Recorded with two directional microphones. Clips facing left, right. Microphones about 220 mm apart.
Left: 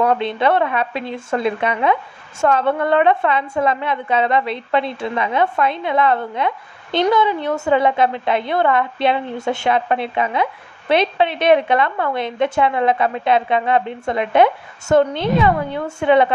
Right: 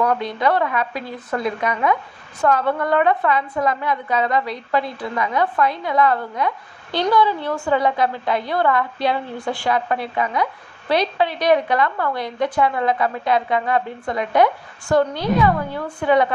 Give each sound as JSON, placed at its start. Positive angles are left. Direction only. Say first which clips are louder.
{"t": 0.0, "sound": "a woman's voice", "louder": "left 3 dB", "side_deg": 25}